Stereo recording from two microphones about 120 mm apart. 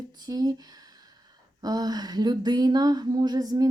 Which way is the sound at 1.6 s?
35° right (ahead or behind).